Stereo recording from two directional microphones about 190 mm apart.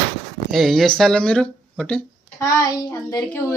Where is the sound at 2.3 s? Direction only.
15° left (ahead or behind).